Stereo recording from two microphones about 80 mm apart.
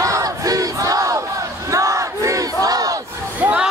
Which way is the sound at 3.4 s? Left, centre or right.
Centre.